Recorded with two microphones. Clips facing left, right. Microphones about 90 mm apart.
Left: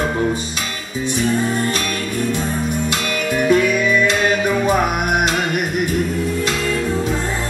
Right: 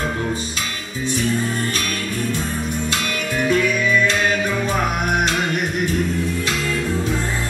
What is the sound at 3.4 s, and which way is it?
Music, 10° left (ahead or behind).